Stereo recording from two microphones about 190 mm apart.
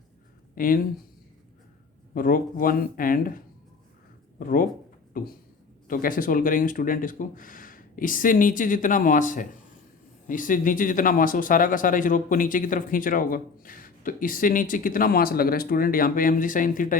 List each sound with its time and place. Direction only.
0.5 s speech: 45° left (ahead or behind)
2.1 s speech: 45° left (ahead or behind)